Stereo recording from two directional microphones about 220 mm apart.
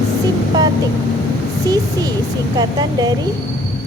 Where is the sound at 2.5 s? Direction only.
20° right (ahead or behind).